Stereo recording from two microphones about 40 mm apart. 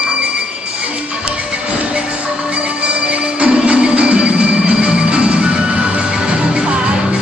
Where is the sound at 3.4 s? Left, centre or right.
Right.